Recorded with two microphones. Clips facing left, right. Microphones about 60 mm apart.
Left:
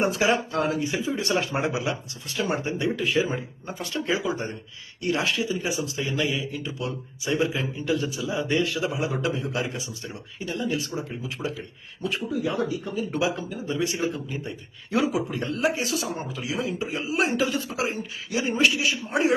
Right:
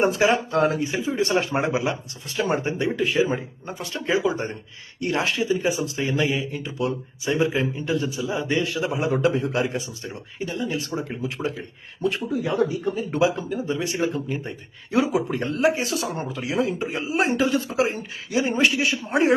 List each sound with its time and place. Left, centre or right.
0.0 s speech: right
10.8 s speech: right
11.3 s speech: right
14.8 s speech: right
15.3 s speech: right